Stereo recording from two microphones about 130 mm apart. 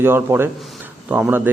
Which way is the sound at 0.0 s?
20° right (ahead or behind).